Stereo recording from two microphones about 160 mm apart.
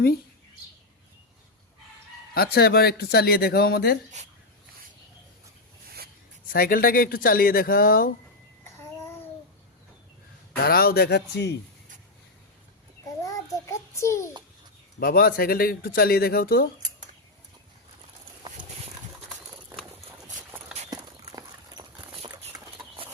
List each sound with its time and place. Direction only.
2.3 s speech: 75° left (ahead or behind)
4.1 s speech: 50° right (ahead or behind)
6.5 s speech: 65° left (ahead or behind)
10.6 s speech: 70° left (ahead or behind); by 11.5 s 90° left
13.2 s child singing: 20° left (ahead or behind)
14.9 s speech: 70° left (ahead or behind)
20.9 s horse: 25° right (ahead or behind)